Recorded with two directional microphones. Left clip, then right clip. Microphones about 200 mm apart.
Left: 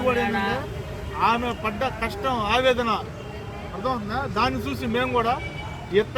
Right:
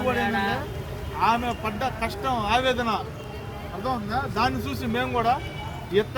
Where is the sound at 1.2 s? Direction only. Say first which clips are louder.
Left 1 dB; 25° right (ahead or behind).